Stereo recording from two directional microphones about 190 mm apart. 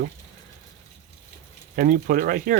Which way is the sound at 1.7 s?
50° right (ahead or behind).